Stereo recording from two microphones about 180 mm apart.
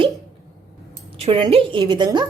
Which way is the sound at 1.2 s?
30° right (ahead or behind).